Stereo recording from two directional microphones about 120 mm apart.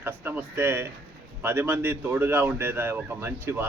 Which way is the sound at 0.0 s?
20° right (ahead or behind).